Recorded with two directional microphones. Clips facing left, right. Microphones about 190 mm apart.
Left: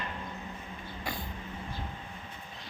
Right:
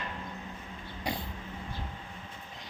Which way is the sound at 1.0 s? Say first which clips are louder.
Right 3 dB; 20° right (ahead or behind).